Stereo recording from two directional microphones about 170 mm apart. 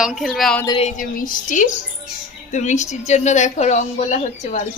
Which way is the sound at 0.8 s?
50° left (ahead or behind).